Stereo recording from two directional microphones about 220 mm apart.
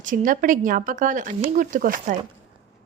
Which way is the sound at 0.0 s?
35° right (ahead or behind).